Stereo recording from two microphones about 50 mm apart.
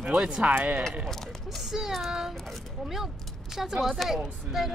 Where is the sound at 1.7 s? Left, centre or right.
Centre.